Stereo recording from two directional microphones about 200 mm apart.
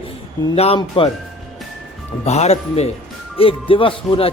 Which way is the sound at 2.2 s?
30° left (ahead or behind).